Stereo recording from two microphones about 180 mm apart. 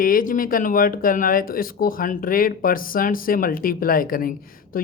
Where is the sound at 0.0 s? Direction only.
50° left (ahead or behind).